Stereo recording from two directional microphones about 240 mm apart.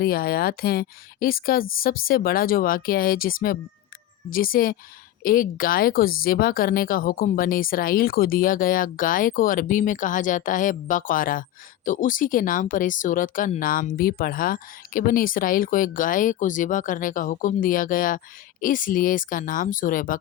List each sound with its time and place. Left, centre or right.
0.0 s speech: left